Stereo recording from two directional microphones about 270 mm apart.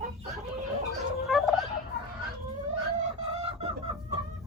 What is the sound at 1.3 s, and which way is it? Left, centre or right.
Turkey, centre.